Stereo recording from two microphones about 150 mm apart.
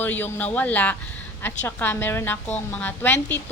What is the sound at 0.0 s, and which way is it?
A woman's voice, 15° left (ahead or behind).